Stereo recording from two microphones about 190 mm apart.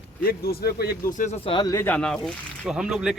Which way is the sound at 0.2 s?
50° left (ahead or behind).